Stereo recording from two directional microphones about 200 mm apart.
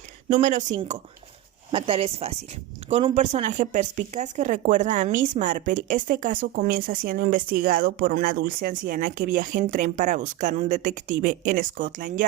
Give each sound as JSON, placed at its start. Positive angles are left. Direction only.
{"t": 0.3, "sound": "speech", "side_deg": -40}
{"t": 1.7, "sound": "speech", "side_deg": -25}